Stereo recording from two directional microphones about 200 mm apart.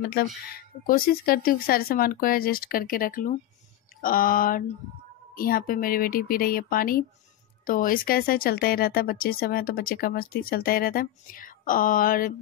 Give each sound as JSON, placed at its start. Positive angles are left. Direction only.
{"t": 0.0, "sound": "speech", "side_deg": 50}